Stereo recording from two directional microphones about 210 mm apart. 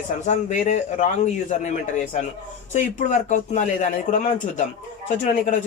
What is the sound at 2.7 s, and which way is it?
Speech, 35° left (ahead or behind).